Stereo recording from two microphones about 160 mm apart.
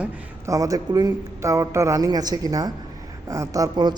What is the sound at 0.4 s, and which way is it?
A man's voice, 20° right (ahead or behind).